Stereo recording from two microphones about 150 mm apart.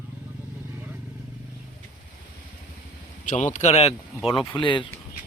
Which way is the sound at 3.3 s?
55° left (ahead or behind).